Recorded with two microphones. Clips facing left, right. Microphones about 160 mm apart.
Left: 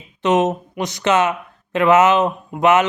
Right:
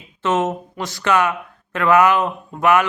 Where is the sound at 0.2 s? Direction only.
20° left (ahead or behind).